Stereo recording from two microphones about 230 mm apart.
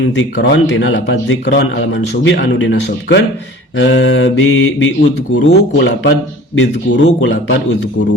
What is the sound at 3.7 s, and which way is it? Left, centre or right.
Mantra, left.